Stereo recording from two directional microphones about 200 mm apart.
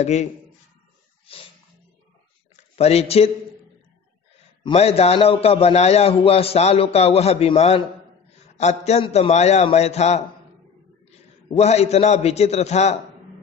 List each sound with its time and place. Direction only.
0.0 s a man's voice: 35° left (ahead or behind)
1.2 s a sound: 30° left (ahead or behind)
2.5 s speech: 30° left (ahead or behind)
4.6 s a man's voice: 30° left (ahead or behind)
11.5 s a man's voice: 35° left (ahead or behind)